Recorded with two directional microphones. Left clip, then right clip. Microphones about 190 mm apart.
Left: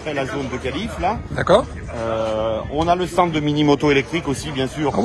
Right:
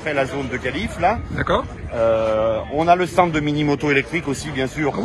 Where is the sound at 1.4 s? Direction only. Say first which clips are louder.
Left 5 dB; 15° left (ahead or behind).